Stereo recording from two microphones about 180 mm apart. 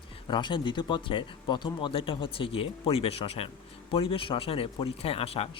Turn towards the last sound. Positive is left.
turn(degrees=30)  # may be behind; listen again after turning